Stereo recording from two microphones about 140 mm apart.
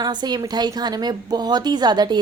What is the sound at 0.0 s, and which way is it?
A woman's voice, 30° right (ahead or behind).